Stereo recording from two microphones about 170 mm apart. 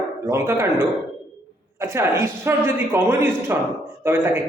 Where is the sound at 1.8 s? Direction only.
15° right (ahead or behind).